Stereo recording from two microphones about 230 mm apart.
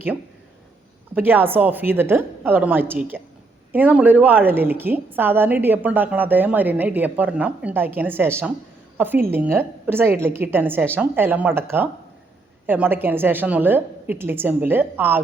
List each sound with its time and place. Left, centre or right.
1.1 s a woman's voice: centre